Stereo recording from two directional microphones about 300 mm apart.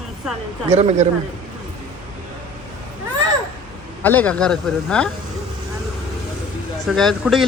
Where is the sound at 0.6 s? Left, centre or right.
Right.